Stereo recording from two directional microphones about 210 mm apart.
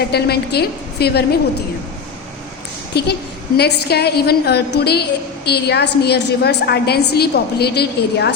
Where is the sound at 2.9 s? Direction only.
50° left (ahead or behind).